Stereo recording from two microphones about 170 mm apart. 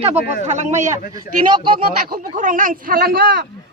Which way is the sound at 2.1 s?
50° right (ahead or behind).